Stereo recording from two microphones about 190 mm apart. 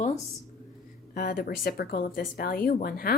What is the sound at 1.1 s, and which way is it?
A woman's voice, 50° left (ahead or behind).